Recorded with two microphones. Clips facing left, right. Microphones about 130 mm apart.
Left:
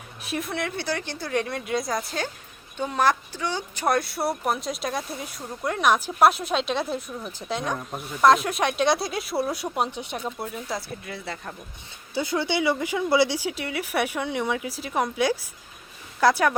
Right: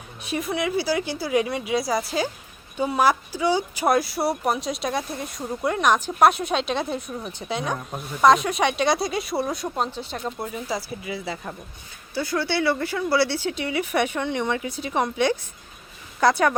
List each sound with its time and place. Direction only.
0.2 s speech: centre (ahead or behind); by 10.2 s 15° left (ahead or behind)
10.2 s speech: centre (ahead or behind)
12.1 s speech: 20° left (ahead or behind); by 16.6 s centre (ahead or behind)